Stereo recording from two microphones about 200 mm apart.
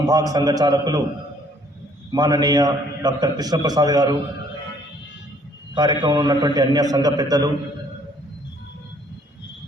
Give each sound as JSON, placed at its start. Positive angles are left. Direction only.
{"t": 0.0, "sound": "a man's voice", "side_deg": -20}
{"t": 2.1, "sound": "a man's voice", "side_deg": -20}
{"t": 5.7, "sound": "a man's voice", "side_deg": -20}